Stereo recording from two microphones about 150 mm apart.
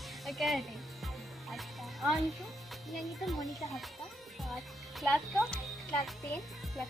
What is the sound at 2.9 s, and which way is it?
Speech, centre (ahead or behind).